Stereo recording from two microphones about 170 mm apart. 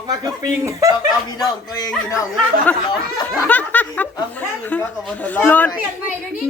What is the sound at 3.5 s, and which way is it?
Speech, 10° left (ahead or behind).